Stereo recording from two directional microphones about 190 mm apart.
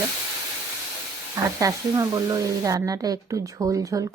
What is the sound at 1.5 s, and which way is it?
Speech, 15° right (ahead or behind).